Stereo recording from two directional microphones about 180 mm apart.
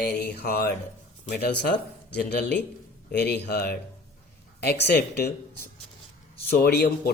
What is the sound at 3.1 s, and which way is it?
Speech, 60° left (ahead or behind).